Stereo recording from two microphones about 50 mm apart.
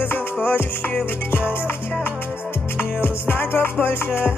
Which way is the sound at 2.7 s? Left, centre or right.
Left.